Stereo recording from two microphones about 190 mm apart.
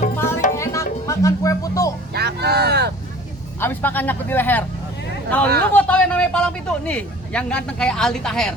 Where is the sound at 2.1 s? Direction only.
60° right (ahead or behind).